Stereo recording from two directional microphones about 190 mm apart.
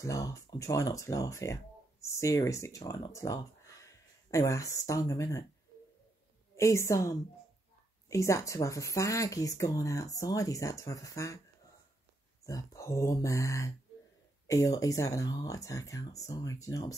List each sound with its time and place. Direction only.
0.0 s speech: 15° left (ahead or behind)
6.5 s speech: 15° left (ahead or behind)
12.4 s speech: 15° left (ahead or behind)